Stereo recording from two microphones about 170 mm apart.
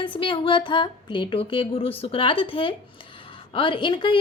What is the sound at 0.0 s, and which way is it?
A woman's voice, 30° left (ahead or behind).